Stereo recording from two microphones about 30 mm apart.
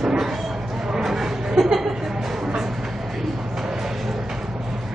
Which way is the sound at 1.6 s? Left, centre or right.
Centre.